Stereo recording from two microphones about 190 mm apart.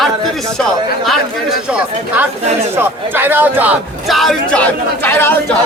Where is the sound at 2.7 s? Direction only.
10° right (ahead or behind); by 5.3 s 10° left (ahead or behind).